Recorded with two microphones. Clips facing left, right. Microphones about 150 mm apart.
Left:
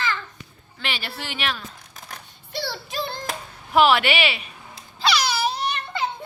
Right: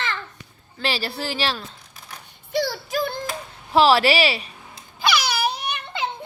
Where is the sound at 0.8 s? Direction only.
35° right (ahead or behind).